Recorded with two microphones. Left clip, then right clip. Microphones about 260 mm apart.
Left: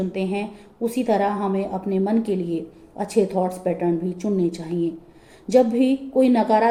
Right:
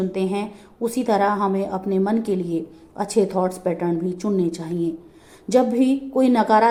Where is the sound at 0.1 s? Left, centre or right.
Right.